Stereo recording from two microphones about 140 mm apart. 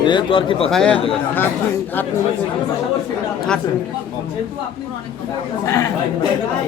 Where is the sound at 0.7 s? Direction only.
5° left (ahead or behind).